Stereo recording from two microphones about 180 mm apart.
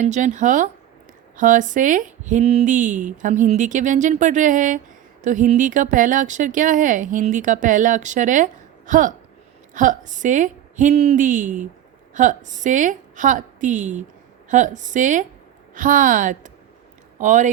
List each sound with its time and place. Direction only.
0.0 s speech: 45° right (ahead or behind)